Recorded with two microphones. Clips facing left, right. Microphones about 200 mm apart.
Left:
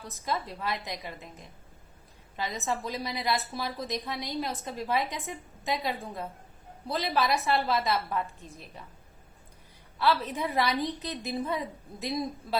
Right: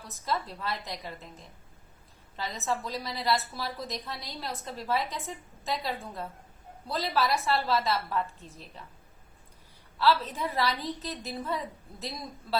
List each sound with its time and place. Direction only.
0.3 s a woman's voice: 15° left (ahead or behind)
2.3 s a woman's voice: 10° left (ahead or behind)
10.0 s a woman's voice: 15° left (ahead or behind)